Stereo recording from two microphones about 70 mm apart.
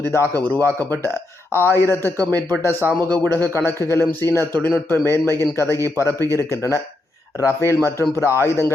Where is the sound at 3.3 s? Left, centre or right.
Left.